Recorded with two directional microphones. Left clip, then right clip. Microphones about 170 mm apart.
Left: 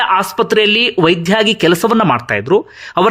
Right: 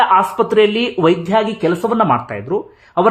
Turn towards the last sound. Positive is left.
turn(degrees=20)  # may be behind; listen again after turning